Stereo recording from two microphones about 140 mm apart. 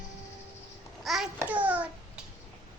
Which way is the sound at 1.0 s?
Centre (ahead or behind).